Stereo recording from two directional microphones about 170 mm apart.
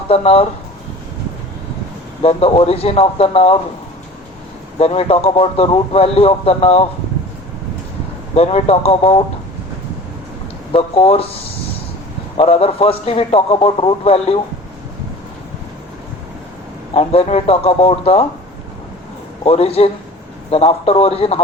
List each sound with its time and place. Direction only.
0.1 s speech: 35° left (ahead or behind)
2.2 s speech: 35° left (ahead or behind)
4.8 s speech: 35° left (ahead or behind)
8.4 s speech: 35° left (ahead or behind)
10.7 s speech: 35° left (ahead or behind)
12.4 s speech: 35° left (ahead or behind)
16.9 s speech: 35° left (ahead or behind)
19.5 s speech: 35° left (ahead or behind)